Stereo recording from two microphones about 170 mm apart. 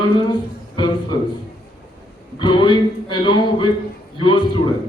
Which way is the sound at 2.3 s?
25° left (ahead or behind).